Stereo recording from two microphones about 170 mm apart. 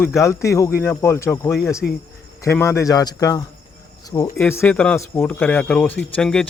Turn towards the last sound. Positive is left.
turn(degrees=5)  # may be behind; listen again after turning